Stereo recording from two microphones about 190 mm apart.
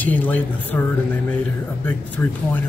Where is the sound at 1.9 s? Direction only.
10° left (ahead or behind).